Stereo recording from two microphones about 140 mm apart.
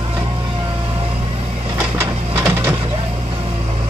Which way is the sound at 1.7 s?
10° right (ahead or behind).